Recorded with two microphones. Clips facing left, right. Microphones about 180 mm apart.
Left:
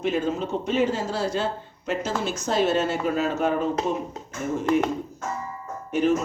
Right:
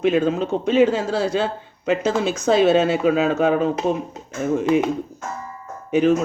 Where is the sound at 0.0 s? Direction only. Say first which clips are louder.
Right 6 dB; 90° right.